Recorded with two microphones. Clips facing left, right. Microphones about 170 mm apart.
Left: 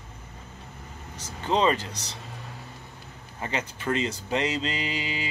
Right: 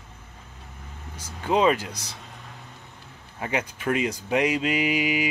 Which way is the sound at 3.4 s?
10° right (ahead or behind).